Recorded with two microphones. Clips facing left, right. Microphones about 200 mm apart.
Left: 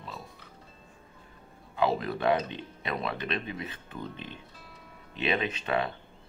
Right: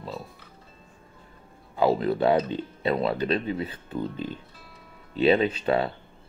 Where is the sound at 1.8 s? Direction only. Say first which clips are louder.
Right 6 dB; 30° right (ahead or behind).